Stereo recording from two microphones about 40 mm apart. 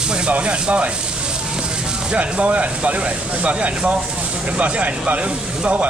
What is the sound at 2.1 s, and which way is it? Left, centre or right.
Speech, right.